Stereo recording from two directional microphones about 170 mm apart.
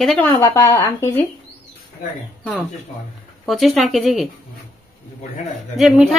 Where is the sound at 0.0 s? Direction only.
5° left (ahead or behind).